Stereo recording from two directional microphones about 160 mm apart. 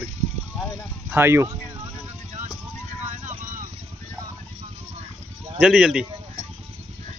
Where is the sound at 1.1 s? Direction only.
15° right (ahead or behind).